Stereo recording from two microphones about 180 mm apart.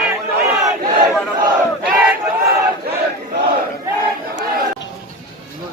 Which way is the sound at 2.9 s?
60° right (ahead or behind).